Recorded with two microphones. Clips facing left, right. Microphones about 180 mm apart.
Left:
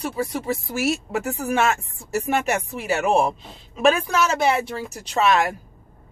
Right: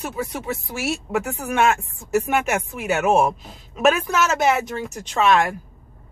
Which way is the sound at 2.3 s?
35° left (ahead or behind).